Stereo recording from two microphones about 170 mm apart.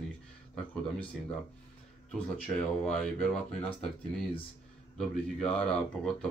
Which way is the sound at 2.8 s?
5° left (ahead or behind).